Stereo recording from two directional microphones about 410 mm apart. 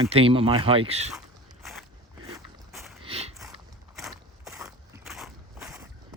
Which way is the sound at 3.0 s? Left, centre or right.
Centre.